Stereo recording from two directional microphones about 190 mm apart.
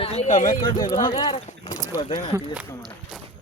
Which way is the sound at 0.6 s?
20° left (ahead or behind).